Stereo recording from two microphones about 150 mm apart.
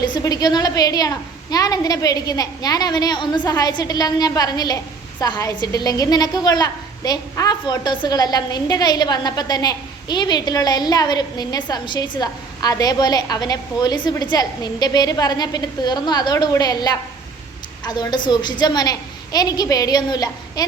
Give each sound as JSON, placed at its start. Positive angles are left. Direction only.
{"t": 0.0, "sound": "a woman's voice", "side_deg": 25}